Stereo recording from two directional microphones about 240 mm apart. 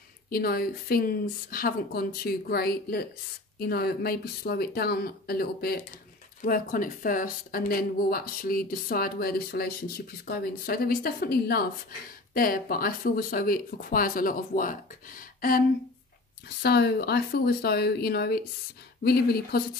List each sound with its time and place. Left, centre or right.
0.3 s speech: left
16.6 s speech: left